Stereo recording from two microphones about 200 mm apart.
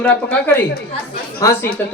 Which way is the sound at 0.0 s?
5° left (ahead or behind).